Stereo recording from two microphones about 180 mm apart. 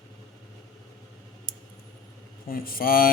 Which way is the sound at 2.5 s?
55° left (ahead or behind).